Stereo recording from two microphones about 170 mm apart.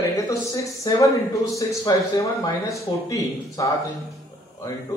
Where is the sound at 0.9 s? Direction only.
20° left (ahead or behind).